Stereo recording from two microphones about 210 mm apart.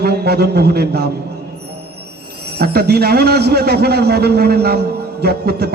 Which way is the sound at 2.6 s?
50° right (ahead or behind).